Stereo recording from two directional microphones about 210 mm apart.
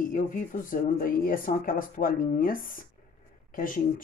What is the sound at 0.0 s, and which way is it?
Speech, 40° left (ahead or behind).